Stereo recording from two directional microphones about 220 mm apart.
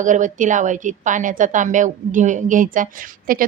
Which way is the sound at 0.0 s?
35° right (ahead or behind).